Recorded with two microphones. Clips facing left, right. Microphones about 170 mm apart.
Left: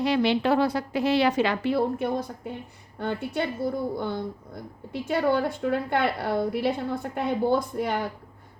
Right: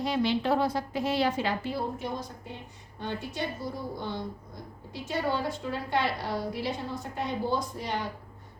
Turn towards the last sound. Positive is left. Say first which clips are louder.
# left 6 dB
turn(degrees=55)  # may be behind; listen again after turning